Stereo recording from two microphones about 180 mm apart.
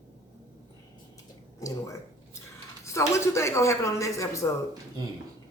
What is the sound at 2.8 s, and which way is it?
Speech, 15° left (ahead or behind).